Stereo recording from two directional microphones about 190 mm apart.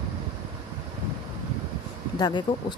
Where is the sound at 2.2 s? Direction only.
25° left (ahead or behind).